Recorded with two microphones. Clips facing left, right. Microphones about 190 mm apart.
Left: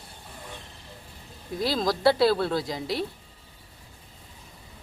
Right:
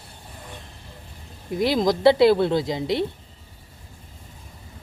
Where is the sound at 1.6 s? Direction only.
20° right (ahead or behind).